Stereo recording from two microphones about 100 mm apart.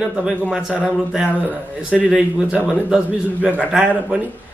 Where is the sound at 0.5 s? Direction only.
5° right (ahead or behind).